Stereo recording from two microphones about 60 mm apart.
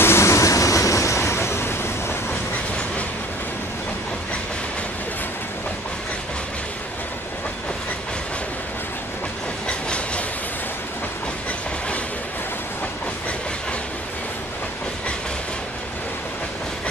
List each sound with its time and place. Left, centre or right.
0.0 s vehicle: left
9.7 s train: centre